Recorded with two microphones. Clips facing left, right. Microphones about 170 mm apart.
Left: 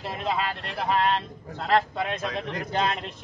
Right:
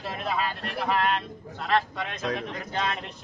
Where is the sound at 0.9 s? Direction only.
30° left (ahead or behind).